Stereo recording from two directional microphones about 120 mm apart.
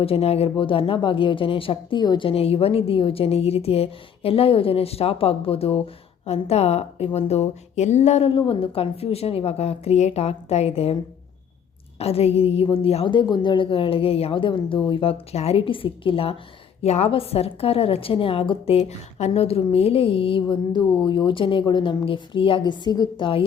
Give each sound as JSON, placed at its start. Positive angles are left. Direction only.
{"t": 0.0, "sound": "a woman's voice", "side_deg": 55}
{"t": 11.9, "sound": "a woman's voice", "side_deg": 55}
{"t": 16.8, "sound": "a woman's voice", "side_deg": 65}